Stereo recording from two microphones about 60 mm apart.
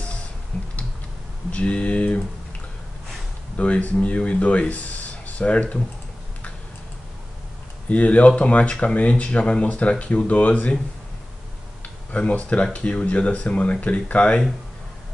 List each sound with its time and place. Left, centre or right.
0.5 s typing: left
1.5 s speech: left
3.5 s speech: left
7.9 s speech: left
12.1 s speech: left